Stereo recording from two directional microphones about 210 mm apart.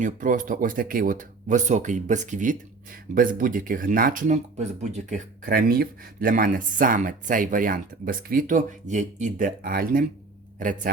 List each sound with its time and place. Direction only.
0.0 s speech: 40° right (ahead or behind)